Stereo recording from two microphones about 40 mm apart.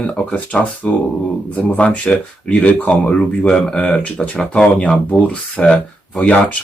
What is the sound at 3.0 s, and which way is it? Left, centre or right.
Speech, left.